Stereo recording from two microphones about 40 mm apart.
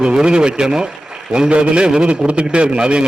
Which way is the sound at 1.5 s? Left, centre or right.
Right.